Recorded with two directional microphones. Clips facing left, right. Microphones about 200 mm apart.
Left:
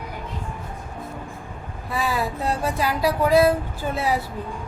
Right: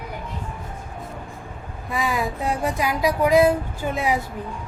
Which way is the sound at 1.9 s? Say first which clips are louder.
Even; 15° right (ahead or behind).